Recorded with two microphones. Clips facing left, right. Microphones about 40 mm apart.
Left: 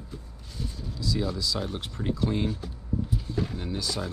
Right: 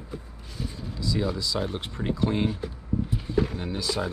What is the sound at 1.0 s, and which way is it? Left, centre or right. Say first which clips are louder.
Speech: right 2 dB; centre.